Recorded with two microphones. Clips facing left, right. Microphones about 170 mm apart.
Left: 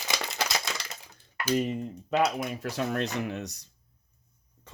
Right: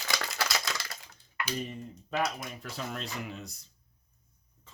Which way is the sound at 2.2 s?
65° left (ahead or behind).